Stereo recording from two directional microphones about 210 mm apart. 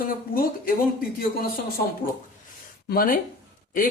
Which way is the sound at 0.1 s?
40° left (ahead or behind).